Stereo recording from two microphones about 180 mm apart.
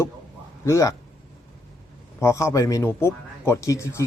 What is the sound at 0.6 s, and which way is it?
Speech, 15° left (ahead or behind).